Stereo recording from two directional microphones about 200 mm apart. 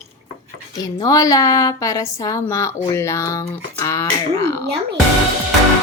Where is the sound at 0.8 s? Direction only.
15° left (ahead or behind).